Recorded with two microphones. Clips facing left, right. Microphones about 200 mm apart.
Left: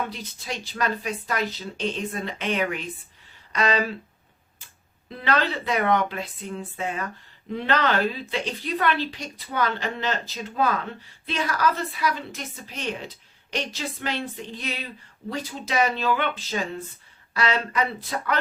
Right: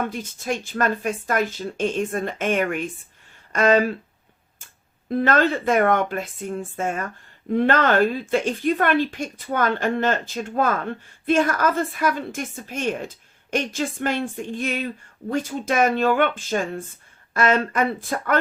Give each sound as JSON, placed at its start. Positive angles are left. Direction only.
{"t": 0.0, "sound": "a woman's voice", "side_deg": -50}
{"t": 5.0, "sound": "a woman's voice", "side_deg": -50}